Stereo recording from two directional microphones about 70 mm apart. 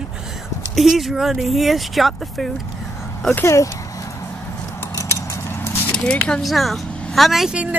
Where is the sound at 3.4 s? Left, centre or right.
Left.